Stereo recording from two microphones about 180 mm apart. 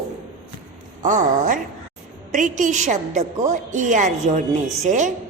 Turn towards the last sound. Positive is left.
turn(degrees=-45)  # may be behind; listen again after turning